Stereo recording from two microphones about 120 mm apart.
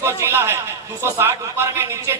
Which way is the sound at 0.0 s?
20° right (ahead or behind).